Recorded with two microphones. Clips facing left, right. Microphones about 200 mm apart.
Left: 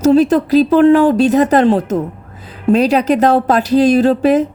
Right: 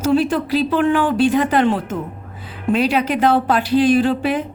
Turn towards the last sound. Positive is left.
turn(degrees=40)  # may be behind; listen again after turning